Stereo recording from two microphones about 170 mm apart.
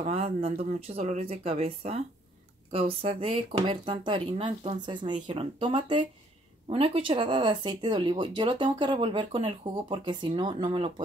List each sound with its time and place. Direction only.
0.0 s speech: 35° right (ahead or behind)